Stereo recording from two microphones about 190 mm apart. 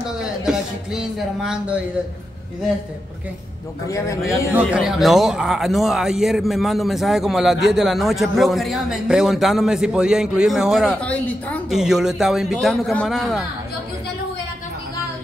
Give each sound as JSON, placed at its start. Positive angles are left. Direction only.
{"t": 0.2, "sound": "a man's voice", "side_deg": -5}
{"t": 3.8, "sound": "a man's voice", "side_deg": 15}
{"t": 4.6, "sound": "a man's voice", "side_deg": -5}
{"t": 11.8, "sound": "a man's voice", "side_deg": -5}